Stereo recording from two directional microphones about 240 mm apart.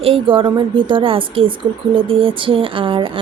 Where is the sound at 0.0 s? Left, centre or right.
Right.